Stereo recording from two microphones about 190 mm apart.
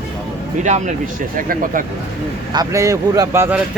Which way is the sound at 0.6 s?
40° right (ahead or behind).